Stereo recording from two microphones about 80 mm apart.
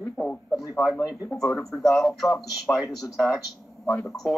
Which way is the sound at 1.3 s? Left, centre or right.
Centre.